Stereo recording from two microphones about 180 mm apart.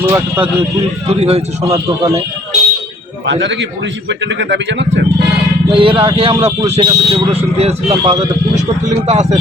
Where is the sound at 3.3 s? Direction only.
80° right.